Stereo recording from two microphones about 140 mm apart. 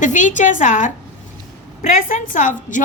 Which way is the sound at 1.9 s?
65° left (ahead or behind).